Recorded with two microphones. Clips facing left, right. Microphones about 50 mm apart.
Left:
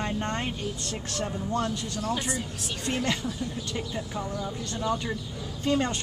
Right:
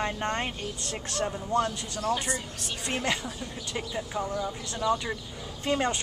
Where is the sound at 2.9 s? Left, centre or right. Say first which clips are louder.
Left 1 dB; centre.